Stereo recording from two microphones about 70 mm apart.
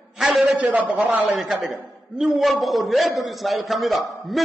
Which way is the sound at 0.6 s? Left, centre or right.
Right.